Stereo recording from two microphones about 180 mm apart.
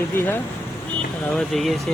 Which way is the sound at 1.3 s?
Centre (ahead or behind).